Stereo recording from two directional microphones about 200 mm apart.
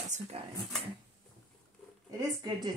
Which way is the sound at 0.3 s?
30° right (ahead or behind).